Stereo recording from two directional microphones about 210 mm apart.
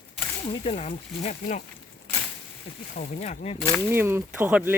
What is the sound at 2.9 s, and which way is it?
Speech, 35° left (ahead or behind).